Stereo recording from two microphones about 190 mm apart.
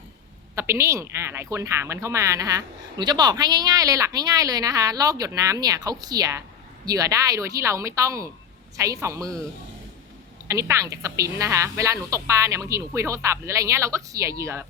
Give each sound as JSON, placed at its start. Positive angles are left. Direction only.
{"t": 0.5, "sound": "speech", "side_deg": -15}
{"t": 10.5, "sound": "speech", "side_deg": -15}